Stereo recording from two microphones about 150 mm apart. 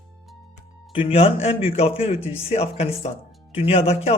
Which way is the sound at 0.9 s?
40° left (ahead or behind).